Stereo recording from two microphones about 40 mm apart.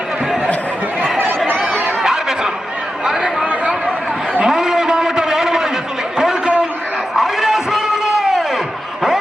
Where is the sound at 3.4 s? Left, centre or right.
Right.